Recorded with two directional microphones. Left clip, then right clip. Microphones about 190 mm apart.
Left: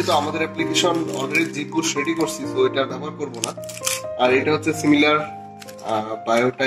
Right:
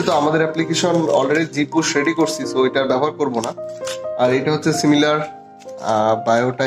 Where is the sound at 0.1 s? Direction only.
50° right (ahead or behind).